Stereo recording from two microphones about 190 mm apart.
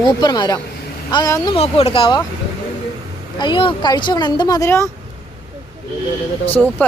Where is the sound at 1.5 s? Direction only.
30° left (ahead or behind).